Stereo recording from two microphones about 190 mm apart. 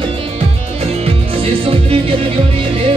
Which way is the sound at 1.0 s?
30° right (ahead or behind).